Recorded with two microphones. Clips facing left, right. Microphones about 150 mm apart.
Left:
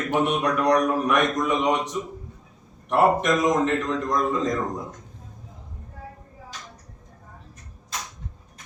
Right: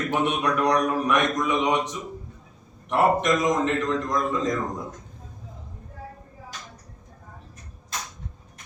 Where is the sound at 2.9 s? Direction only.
5° left (ahead or behind).